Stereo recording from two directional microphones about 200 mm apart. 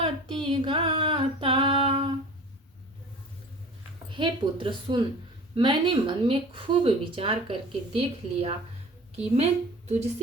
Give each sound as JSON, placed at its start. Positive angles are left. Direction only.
{"t": 0.0, "sound": "female singing", "side_deg": -25}
{"t": 4.1, "sound": "a woman's voice", "side_deg": -25}